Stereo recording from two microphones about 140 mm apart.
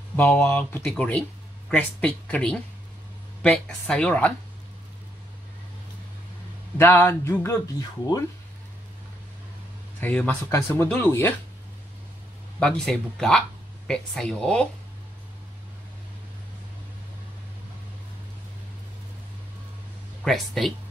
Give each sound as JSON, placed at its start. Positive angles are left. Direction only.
{"t": 0.1, "sound": "speech", "side_deg": 10}
{"t": 6.8, "sound": "speech", "side_deg": 15}
{"t": 9.9, "sound": "speech", "side_deg": 10}
{"t": 12.5, "sound": "speech", "side_deg": 5}
{"t": 20.2, "sound": "speech", "side_deg": 0}